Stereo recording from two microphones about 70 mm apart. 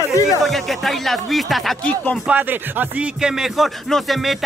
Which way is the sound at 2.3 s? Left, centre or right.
Right.